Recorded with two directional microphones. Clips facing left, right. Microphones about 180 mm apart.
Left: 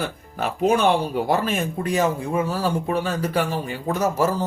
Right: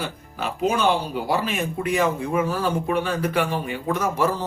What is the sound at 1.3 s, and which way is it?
Speech, 45° left (ahead or behind).